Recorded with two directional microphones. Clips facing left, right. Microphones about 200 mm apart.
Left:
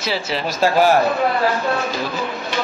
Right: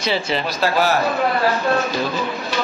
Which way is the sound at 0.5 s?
45° left (ahead or behind).